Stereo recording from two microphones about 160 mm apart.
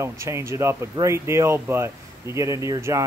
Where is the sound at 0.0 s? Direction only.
15° right (ahead or behind).